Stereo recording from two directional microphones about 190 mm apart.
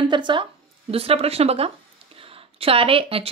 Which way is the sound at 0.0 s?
25° right (ahead or behind).